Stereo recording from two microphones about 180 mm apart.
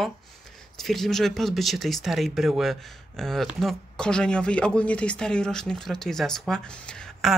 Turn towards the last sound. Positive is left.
turn(degrees=0)  # may be behind; listen again after turning